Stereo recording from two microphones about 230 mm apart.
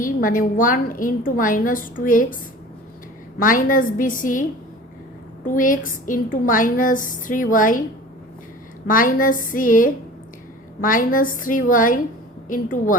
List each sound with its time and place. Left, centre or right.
0.0 s a woman's voice: left
5.5 s a woman's voice: left
8.9 s a woman's voice: left